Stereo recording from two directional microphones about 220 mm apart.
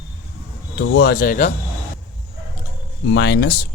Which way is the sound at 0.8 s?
50° left (ahead or behind).